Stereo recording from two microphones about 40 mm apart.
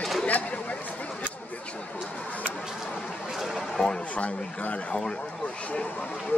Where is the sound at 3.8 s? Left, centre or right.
Left.